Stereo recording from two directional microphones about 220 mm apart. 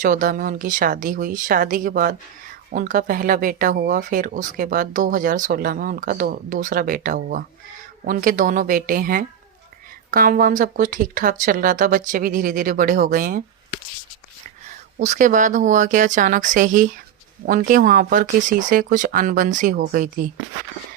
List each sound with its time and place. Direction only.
0.0 s speech: 40° right (ahead or behind)
14.9 s speech: 30° right (ahead or behind)